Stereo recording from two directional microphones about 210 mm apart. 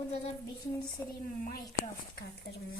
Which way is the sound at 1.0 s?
15° left (ahead or behind).